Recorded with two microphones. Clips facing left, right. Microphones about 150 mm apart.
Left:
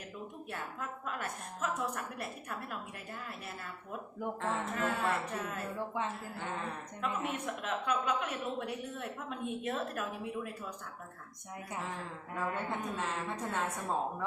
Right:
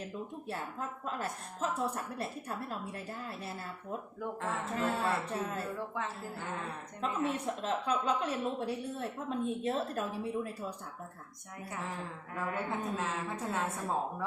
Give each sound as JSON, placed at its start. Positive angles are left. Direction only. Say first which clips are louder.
{"t": 0.5, "sound": "a woman's voice", "louder": "right 2 dB", "side_deg": -30}
{"t": 4.8, "sound": "a woman's voice", "louder": "right 2 dB", "side_deg": -30}
{"t": 7.0, "sound": "a woman's voice", "louder": "right 3 dB", "side_deg": -30}
{"t": 12.4, "sound": "a woman's voice", "louder": "right 1 dB", "side_deg": 0}